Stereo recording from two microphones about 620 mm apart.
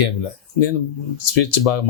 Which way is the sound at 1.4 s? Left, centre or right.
Left.